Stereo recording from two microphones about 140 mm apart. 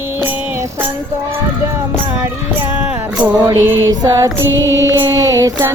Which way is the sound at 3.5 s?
25° right (ahead or behind).